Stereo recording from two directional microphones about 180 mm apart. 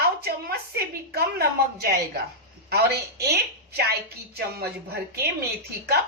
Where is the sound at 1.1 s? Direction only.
60° right (ahead or behind).